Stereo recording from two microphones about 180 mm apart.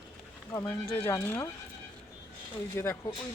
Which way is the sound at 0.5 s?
15° left (ahead or behind).